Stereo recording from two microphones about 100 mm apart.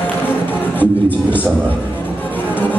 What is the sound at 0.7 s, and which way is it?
Music, 20° left (ahead or behind).